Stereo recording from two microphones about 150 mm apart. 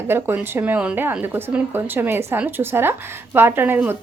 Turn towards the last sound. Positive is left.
turn(degrees=-15)  # may be behind; listen again after turning